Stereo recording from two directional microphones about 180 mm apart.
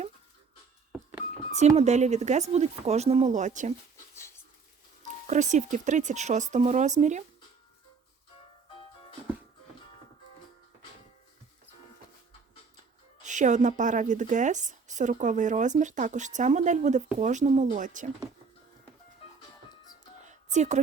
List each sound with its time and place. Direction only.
1.5 s speech: 40° right (ahead or behind)
5.2 s speech: 40° right (ahead or behind)
13.2 s a woman's voice: 45° right (ahead or behind)
20.2 s a sound: 40° right (ahead or behind)